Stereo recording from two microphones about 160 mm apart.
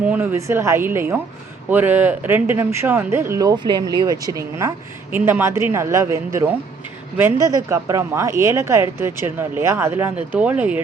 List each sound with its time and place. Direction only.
0.0 s speech: 10° right (ahead or behind)